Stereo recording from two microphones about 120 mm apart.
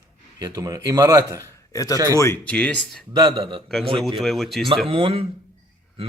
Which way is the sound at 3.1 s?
35° right (ahead or behind).